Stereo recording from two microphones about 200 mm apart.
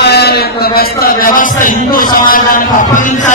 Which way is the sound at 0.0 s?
55° left (ahead or behind).